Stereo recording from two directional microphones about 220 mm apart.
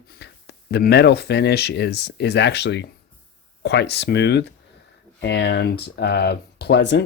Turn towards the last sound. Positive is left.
turn(degrees=50)  # may be behind; listen again after turning